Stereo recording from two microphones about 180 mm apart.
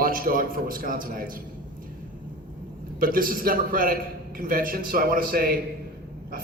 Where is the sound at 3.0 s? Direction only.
50° right (ahead or behind).